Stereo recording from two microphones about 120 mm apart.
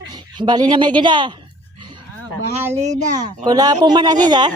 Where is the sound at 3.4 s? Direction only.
35° right (ahead or behind).